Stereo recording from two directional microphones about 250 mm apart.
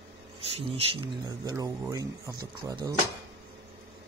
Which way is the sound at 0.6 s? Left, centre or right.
Right.